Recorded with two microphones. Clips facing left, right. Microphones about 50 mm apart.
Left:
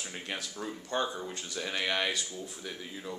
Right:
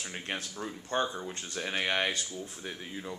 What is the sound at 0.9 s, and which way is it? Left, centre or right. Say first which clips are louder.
Speech: right 1 dB; right.